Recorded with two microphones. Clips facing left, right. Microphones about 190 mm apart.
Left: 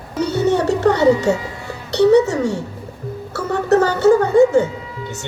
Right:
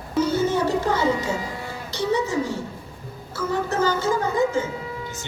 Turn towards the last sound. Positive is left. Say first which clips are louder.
# left 10 dB
turn(degrees=70)  # may be behind; listen again after turning